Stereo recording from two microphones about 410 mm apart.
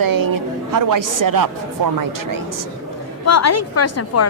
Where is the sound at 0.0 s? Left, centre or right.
Right.